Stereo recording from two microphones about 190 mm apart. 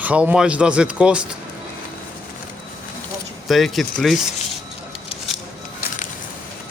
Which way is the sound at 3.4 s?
Centre (ahead or behind).